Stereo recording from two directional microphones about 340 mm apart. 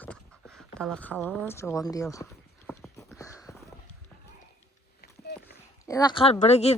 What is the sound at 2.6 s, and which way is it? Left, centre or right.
Horse, centre.